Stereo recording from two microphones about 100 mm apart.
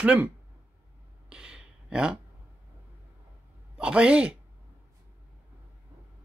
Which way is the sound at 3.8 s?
10° right (ahead or behind).